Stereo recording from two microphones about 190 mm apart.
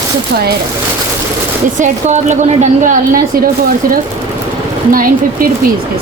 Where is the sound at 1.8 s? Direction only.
40° right (ahead or behind).